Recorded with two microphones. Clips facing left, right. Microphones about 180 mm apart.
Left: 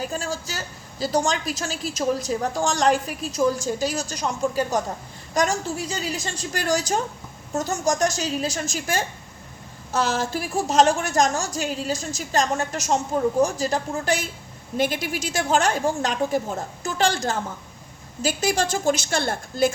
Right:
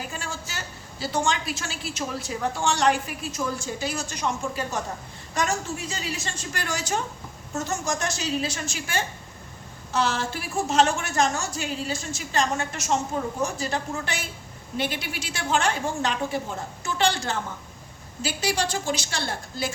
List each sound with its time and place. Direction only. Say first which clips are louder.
0.1 s a woman's voice: left 6 dB; 40° left (ahead or behind)